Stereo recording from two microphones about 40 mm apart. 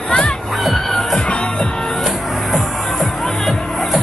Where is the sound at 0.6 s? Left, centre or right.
Centre.